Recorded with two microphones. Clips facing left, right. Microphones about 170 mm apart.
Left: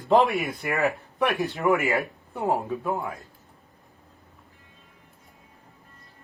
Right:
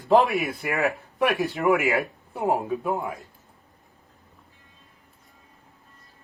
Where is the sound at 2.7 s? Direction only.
15° right (ahead or behind).